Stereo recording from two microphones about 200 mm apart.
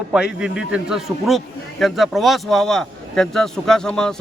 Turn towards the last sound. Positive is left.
turn(degrees=5)  # may be behind; listen again after turning